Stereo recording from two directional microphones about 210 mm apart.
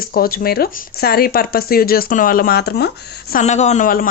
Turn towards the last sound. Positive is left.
turn(degrees=40)  # may be behind; listen again after turning